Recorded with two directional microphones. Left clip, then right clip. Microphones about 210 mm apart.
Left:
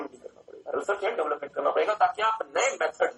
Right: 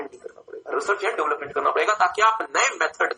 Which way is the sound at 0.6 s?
45° right (ahead or behind).